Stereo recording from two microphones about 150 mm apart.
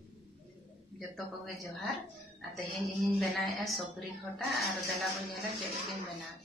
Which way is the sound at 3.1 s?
Centre (ahead or behind).